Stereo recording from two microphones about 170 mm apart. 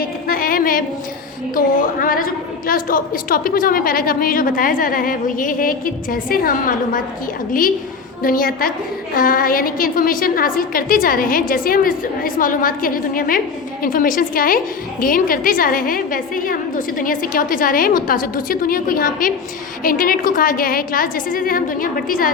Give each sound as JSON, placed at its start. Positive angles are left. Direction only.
{"t": 0.0, "sound": "music", "side_deg": 55}
{"t": 1.5, "sound": "a woman's voice", "side_deg": 55}
{"t": 8.2, "sound": "a woman's voice", "side_deg": 55}